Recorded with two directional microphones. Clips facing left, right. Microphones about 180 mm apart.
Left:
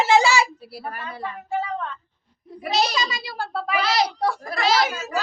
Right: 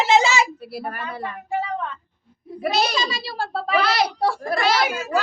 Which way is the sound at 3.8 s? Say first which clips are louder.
Even; 60° right (ahead or behind).